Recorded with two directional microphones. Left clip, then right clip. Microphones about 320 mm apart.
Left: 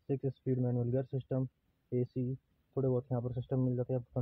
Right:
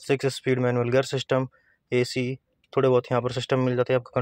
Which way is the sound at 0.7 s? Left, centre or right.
Right.